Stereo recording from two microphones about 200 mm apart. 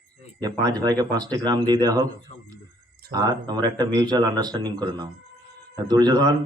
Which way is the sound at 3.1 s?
20° right (ahead or behind).